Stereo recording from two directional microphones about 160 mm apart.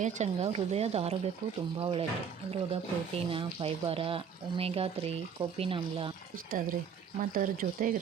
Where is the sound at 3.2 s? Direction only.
35° right (ahead or behind).